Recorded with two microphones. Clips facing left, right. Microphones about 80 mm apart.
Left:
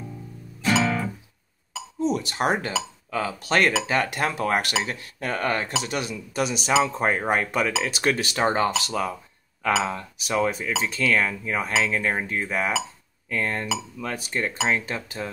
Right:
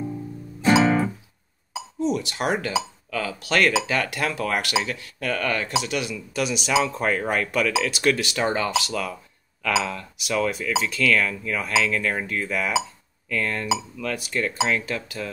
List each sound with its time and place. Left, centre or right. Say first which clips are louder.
0.6 s guitar: right 5 dB; right
2.0 s speech: even; left
3.1 s cutlery: left 2 dB; left
5.9 s speech: right 1 dB; left
10.8 s cutlery: right 1 dB; left
14.0 s speech: right 2 dB; left
14.7 s cutlery: even; left